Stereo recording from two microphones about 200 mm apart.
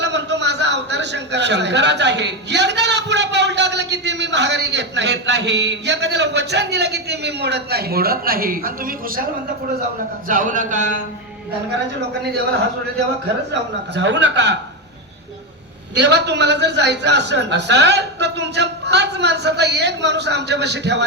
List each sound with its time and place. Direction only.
0.0 s a man's voice: 60° right (ahead or behind); by 10.9 s 40° right (ahead or behind)
13.5 s a man's voice: 60° right (ahead or behind)
16.0 s a man's voice: 60° right (ahead or behind)